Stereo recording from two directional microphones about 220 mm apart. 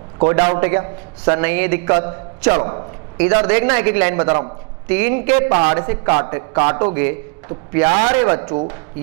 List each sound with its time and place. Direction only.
0.3 s a man's voice: 15° right (ahead or behind)
5.5 s a man's voice: 30° right (ahead or behind)
6.9 s a man's voice: 10° right (ahead or behind)